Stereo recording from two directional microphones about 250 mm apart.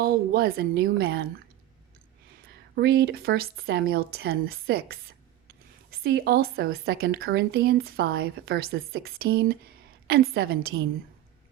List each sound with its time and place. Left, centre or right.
0.0 s a woman's voice: right
2.7 s a woman's voice: right